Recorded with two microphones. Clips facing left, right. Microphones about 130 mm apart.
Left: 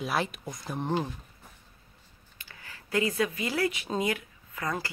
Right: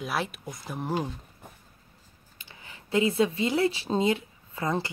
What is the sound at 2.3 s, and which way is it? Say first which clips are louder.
Speech: even; 20° right (ahead or behind).